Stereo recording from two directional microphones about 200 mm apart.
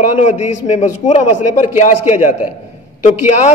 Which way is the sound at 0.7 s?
35° left (ahead or behind).